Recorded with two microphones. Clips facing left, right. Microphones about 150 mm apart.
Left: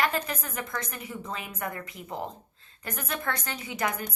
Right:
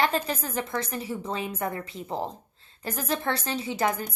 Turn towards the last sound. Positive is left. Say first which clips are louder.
# right 4 dB
turn(degrees=-30)  # may be behind; listen again after turning